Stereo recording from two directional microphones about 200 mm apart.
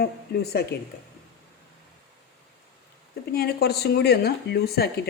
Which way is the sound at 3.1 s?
50° left (ahead or behind).